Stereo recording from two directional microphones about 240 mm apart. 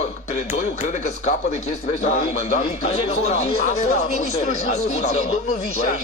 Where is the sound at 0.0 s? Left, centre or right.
Left.